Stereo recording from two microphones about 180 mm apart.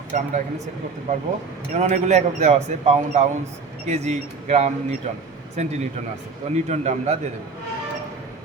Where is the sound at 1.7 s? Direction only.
40° right (ahead or behind).